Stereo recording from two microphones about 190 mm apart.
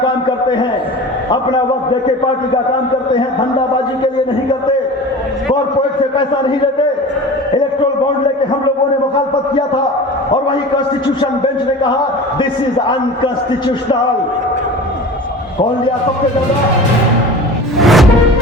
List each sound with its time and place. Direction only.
0.0 s a sound: 25° left (ahead or behind)
12.9 s a man's voice: 25° left (ahead or behind)
17.7 s music: centre (ahead or behind)